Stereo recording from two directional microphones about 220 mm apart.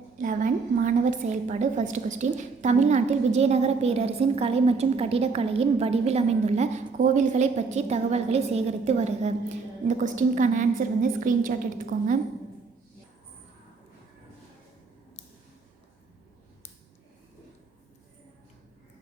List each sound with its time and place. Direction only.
0.2 s a woman's voice: 35° right (ahead or behind)